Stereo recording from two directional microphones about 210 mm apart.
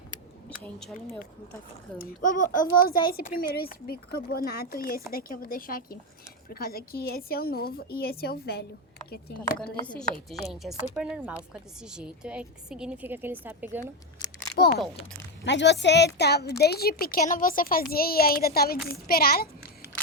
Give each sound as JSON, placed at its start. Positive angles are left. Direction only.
{"t": 0.6, "sound": "a woman's voice", "side_deg": 5}
{"t": 2.0, "sound": "a woman's voice", "side_deg": 40}
{"t": 9.8, "sound": "a woman's voice", "side_deg": 5}
{"t": 14.6, "sound": "a woman's voice", "side_deg": 40}
{"t": 15.4, "sound": "a woman's voice", "side_deg": 55}